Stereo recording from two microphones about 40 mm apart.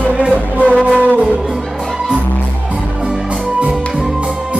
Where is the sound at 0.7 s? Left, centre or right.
Right.